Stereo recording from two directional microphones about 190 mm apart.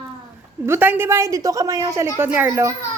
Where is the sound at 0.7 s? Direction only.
10° right (ahead or behind).